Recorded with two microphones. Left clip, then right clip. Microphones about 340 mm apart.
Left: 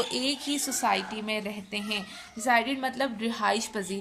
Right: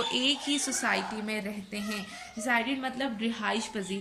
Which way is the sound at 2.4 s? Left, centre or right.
Centre.